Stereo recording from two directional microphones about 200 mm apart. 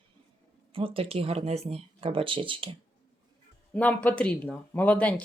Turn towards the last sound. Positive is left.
turn(degrees=5)  # may be behind; listen again after turning